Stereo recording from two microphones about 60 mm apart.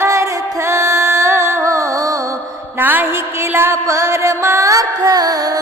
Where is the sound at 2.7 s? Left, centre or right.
Right.